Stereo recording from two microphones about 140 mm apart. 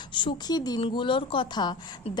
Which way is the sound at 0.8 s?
40° left (ahead or behind).